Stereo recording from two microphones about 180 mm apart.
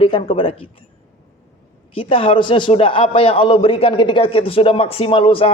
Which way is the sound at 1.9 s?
30° left (ahead or behind).